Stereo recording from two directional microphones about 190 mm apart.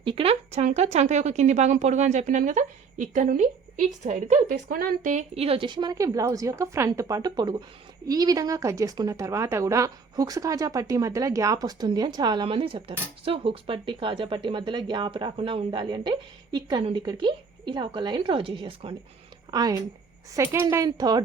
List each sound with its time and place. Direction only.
0.0 s a woman's voice: 30° right (ahead or behind)